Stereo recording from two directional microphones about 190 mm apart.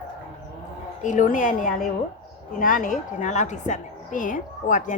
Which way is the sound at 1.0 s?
45° left (ahead or behind).